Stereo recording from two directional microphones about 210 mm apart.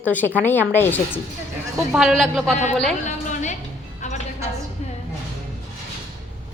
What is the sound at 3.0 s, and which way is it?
Music, 35° left (ahead or behind).